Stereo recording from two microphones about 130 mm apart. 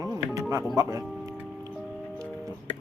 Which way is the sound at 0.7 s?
30° right (ahead or behind).